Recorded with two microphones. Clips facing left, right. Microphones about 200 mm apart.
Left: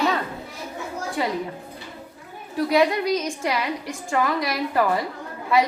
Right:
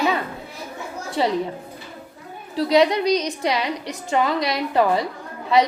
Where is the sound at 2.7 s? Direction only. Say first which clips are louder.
Right 3 dB; 20° right (ahead or behind).